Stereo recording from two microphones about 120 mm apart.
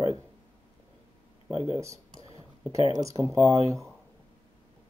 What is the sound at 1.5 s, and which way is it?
Speech, 45° left (ahead or behind).